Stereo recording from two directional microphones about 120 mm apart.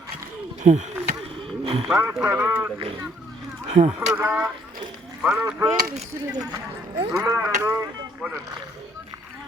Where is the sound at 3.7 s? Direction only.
60° right (ahead or behind).